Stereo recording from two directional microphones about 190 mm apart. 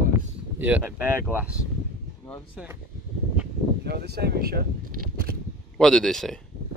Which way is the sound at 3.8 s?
60° right (ahead or behind).